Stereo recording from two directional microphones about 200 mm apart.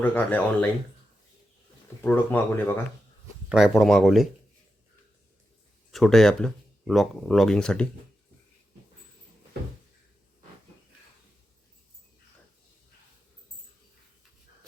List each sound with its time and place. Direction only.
0.0 s speech: 10° left (ahead or behind)
2.0 s speech: 10° left (ahead or behind)
5.9 s speech: centre (ahead or behind)